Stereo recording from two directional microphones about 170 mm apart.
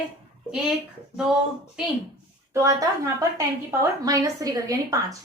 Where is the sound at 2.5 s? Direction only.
15° right (ahead or behind).